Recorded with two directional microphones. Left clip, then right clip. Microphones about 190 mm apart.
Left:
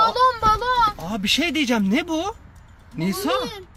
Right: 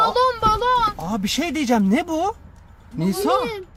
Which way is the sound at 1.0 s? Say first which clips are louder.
Left 2 dB; 15° right (ahead or behind).